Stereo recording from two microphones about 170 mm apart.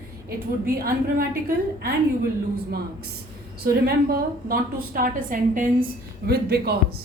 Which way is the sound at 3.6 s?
65° right (ahead or behind).